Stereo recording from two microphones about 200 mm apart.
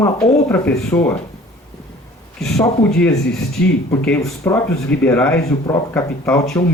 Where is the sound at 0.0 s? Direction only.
10° left (ahead or behind).